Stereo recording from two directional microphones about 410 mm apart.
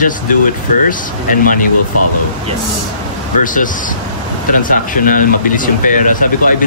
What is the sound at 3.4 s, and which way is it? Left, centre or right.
Speech, centre.